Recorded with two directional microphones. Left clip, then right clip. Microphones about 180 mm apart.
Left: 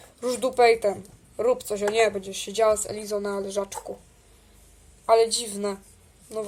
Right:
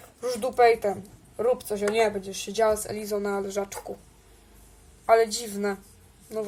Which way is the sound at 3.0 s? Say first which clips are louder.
Even; 10° left (ahead or behind).